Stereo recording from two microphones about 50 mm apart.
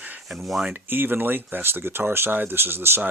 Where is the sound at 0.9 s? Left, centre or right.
Right.